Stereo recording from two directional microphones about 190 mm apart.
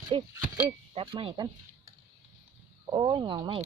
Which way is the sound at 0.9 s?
30° right (ahead or behind).